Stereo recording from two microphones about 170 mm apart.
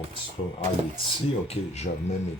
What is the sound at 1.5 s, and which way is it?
Speech, 40° left (ahead or behind).